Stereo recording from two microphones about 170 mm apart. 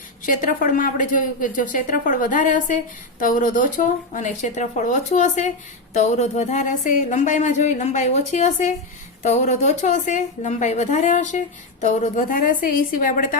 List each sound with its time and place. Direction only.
0.3 s a woman's voice: 50° left (ahead or behind)